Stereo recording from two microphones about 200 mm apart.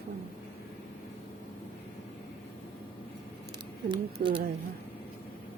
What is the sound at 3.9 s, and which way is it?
Speech, 25° right (ahead or behind).